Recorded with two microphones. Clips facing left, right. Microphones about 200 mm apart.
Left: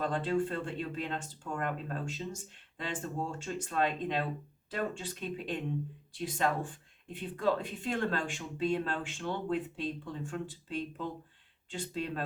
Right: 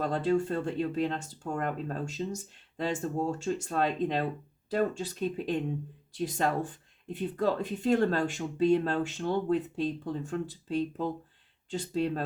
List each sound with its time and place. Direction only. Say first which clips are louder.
0.0 s speech: right 4 dB; 40° right (ahead or behind)